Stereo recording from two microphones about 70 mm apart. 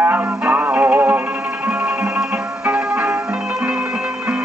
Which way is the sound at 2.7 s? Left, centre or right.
Centre.